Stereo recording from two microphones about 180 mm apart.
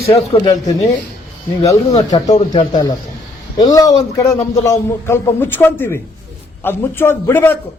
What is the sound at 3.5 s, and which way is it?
A man's voice, 20° left (ahead or behind).